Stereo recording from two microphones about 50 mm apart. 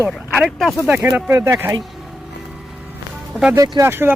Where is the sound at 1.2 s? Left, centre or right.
Right.